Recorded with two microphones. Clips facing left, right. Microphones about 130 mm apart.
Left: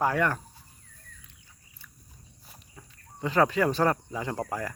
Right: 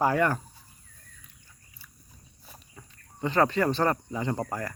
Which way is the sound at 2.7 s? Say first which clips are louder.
Left 1 dB; centre (ahead or behind).